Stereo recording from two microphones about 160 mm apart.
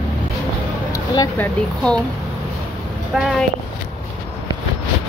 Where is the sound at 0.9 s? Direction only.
25° left (ahead or behind).